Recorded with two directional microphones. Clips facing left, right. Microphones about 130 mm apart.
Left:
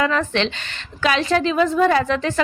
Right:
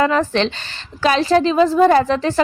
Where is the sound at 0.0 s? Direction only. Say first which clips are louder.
Right 4 dB; 35° right (ahead or behind).